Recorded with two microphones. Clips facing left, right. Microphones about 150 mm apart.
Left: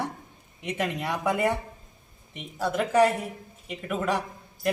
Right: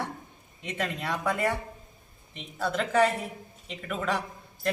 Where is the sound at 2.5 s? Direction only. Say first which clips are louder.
Left 3 dB; 10° left (ahead or behind).